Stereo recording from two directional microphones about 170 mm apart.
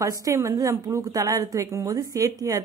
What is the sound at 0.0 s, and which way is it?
A woman's voice, 20° right (ahead or behind).